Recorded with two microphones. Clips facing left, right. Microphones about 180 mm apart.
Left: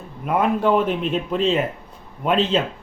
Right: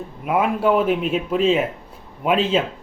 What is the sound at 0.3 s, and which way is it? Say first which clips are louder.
Speech: even; 5° right (ahead or behind).